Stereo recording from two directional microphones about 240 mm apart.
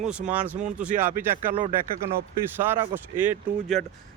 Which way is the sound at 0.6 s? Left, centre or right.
Right.